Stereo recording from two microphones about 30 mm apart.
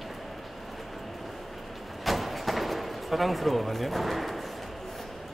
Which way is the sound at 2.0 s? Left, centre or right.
Centre.